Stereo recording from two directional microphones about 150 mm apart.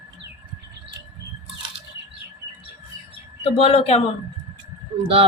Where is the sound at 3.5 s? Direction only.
40° left (ahead or behind).